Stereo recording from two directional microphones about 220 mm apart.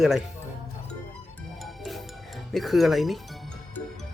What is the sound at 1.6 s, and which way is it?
Music, centre (ahead or behind).